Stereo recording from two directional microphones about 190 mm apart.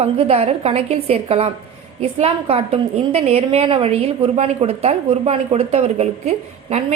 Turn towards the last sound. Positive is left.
turn(degrees=-35)  # may be behind; listen again after turning